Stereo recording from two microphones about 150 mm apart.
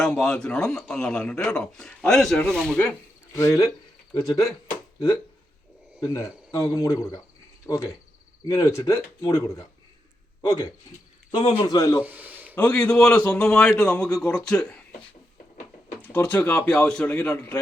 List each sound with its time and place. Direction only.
0.0 s speech: 5° left (ahead or behind)
3.3 s cricket: 20° left (ahead or behind)
6.1 s cricket: 20° left (ahead or behind)
12.0 s a sound: 10° right (ahead or behind)
12.5 s a man's voice: 15° left (ahead or behind)
16.0 s a man's voice: 15° left (ahead or behind)